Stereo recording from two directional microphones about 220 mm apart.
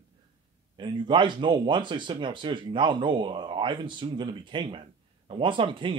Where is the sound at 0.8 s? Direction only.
20° right (ahead or behind).